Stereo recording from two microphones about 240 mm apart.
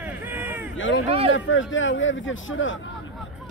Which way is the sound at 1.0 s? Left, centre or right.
Right.